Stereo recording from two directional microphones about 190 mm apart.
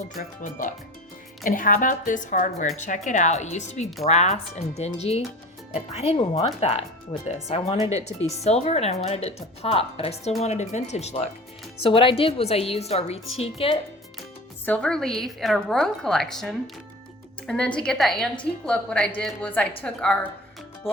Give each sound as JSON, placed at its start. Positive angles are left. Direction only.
{"t": 1.5, "sound": "a woman's voice", "side_deg": 45}
{"t": 14.6, "sound": "a woman's voice", "side_deg": 5}